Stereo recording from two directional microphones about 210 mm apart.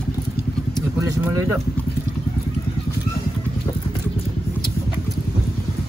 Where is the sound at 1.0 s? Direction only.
15° right (ahead or behind).